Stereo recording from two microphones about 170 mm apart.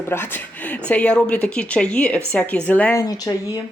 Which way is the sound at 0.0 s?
15° left (ahead or behind).